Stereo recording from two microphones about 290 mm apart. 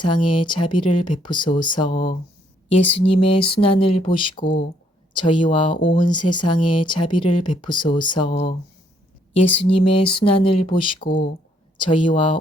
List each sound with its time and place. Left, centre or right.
0.0 s speech: centre